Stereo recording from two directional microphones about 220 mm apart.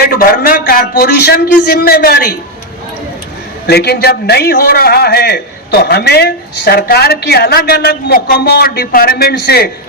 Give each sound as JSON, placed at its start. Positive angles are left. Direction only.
{"t": 0.2, "sound": "a man's voice", "side_deg": 40}
{"t": 3.7, "sound": "a man's voice", "side_deg": 45}